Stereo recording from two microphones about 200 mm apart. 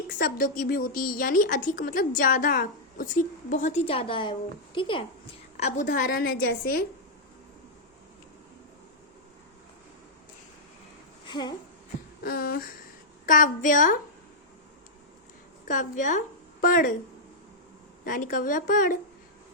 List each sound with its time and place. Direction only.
0.1 s a woman's voice: 45° left (ahead or behind); by 5.0 s 25° left (ahead or behind)
5.5 s a woman's voice: 35° left (ahead or behind); by 6.8 s 55° left (ahead or behind)
11.3 s a sound: 20° left (ahead or behind)
12.2 s a woman's voice: 50° left (ahead or behind)
15.6 s a woman's voice: 40° left (ahead or behind)
18.0 s a woman's voice: 45° left (ahead or behind)